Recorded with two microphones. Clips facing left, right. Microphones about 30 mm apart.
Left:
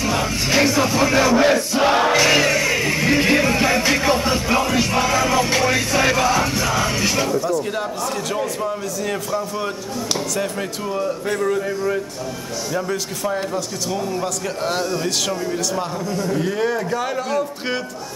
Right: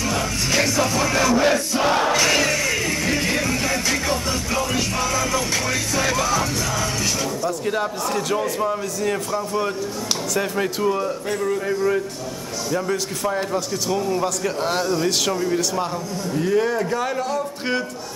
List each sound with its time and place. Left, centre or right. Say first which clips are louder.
0.0 s music: left 2 dB; centre
7.4 s a man's voice: left 1 dB; centre
11.2 s a man's voice: left 5 dB; centre
11.6 s a man's voice: right 1 dB; centre
16.2 s a man's voice: right 1 dB; centre